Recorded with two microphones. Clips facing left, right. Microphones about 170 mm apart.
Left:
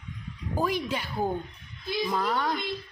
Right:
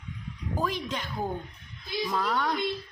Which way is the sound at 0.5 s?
10° left (ahead or behind).